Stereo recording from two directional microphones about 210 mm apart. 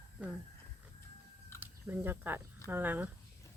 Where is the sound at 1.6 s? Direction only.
10° right (ahead or behind).